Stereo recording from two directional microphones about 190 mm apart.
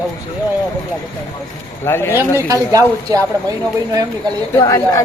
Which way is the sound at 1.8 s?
10° left (ahead or behind).